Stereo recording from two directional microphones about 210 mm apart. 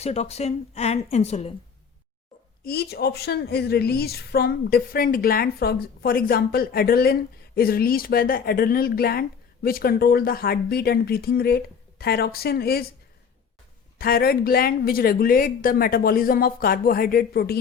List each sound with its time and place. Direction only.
0.0 s speech: 30° left (ahead or behind)
2.6 s a woman's voice: 50° left (ahead or behind)
14.0 s a woman's voice: 45° left (ahead or behind)